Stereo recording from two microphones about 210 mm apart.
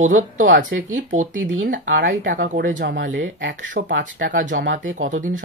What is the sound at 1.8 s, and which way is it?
Speech, 55° right (ahead or behind).